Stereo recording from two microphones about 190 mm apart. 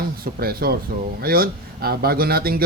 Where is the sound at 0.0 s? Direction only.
55° right (ahead or behind).